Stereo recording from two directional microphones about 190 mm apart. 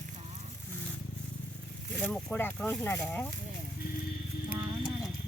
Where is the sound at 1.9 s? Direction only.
5° left (ahead or behind).